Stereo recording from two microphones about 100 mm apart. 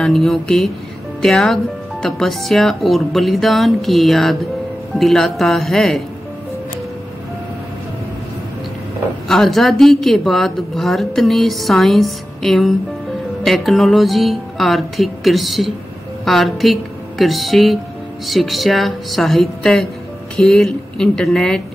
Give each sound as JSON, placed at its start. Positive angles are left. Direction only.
{"t": 0.0, "sound": "a woman's voice", "side_deg": 5}
{"t": 9.3, "sound": "a woman's voice", "side_deg": 0}